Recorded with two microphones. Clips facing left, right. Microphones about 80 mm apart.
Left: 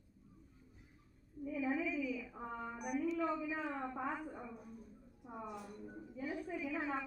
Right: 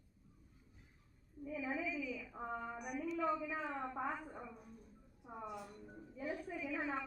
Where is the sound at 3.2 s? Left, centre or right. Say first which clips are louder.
Even; centre.